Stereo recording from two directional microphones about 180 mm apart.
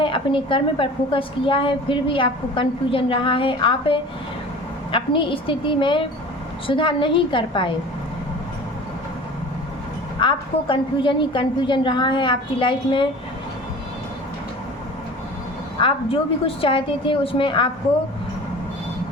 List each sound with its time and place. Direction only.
0.0 s a woman's voice: 30° left (ahead or behind)
10.2 s a woman's voice: 25° left (ahead or behind)
15.8 s a woman's voice: 30° left (ahead or behind)